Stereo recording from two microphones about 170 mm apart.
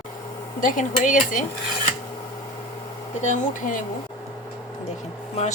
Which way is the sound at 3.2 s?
50° left (ahead or behind).